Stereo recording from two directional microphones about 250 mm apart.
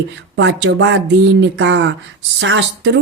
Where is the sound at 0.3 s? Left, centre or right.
Right.